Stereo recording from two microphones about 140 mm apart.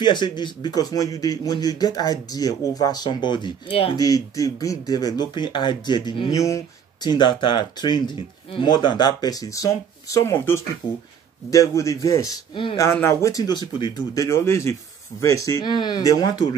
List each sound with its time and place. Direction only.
0.0 s a man's voice: 35° left (ahead or behind)
3.9 s a man's voice: 25° left (ahead or behind)
10.8 s a man's voice: 30° left (ahead or behind)
15.6 s a man's voice: 30° left (ahead or behind)